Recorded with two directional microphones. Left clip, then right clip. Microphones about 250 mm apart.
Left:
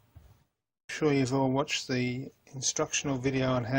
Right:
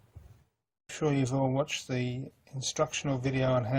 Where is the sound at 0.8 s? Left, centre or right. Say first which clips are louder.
Left 3 dB; centre.